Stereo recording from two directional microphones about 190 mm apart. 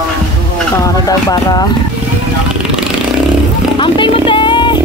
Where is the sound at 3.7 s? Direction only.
25° left (ahead or behind).